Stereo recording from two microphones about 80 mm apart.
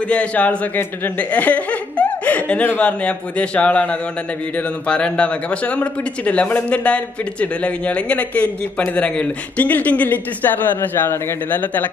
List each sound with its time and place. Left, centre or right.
0.1 s speech: centre